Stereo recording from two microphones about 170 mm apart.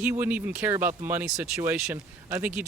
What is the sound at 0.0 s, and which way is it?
Speech, 10° right (ahead or behind).